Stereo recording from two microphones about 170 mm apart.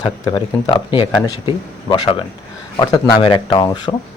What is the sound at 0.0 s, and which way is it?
A man's voice, 25° left (ahead or behind).